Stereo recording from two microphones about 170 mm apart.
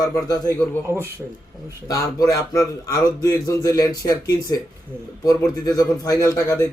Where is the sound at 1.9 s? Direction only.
20° left (ahead or behind).